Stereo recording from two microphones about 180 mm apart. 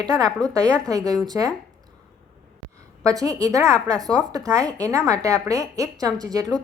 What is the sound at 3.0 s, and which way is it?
A woman's voice, 20° right (ahead or behind).